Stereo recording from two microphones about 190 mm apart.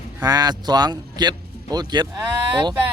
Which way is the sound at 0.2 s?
20° right (ahead or behind).